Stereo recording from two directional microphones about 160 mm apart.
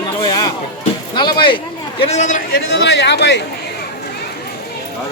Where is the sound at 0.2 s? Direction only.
25° left (ahead or behind).